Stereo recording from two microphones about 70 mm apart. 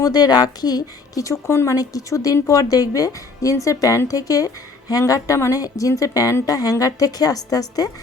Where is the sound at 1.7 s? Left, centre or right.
Left.